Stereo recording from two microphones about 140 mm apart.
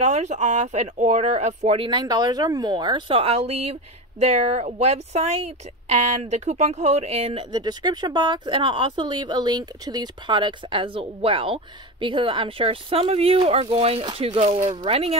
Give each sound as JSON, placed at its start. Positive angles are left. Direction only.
{"t": 0.0, "sound": "speech", "side_deg": -55}
{"t": 1.9, "sound": "speech", "side_deg": -30}
{"t": 7.5, "sound": "speech", "side_deg": -30}